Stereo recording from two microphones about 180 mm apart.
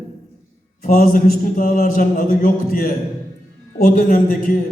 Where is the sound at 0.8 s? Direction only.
50° left (ahead or behind).